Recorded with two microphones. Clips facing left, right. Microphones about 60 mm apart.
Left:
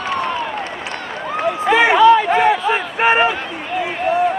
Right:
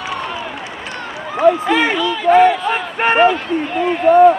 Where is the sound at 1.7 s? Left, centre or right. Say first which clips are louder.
Left 2 dB; centre.